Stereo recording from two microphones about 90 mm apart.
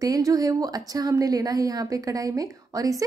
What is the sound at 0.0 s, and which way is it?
A woman's voice, 40° right (ahead or behind).